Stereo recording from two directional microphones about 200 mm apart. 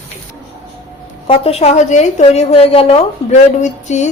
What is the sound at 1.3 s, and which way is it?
A woman's voice, 30° left (ahead or behind).